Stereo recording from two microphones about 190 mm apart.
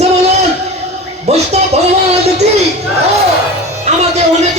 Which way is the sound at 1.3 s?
35° right (ahead or behind).